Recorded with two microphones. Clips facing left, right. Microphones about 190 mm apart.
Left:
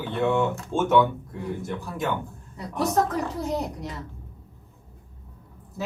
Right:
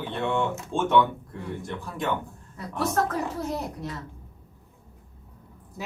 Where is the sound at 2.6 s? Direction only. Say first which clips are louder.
Left 2 dB; 15° left (ahead or behind).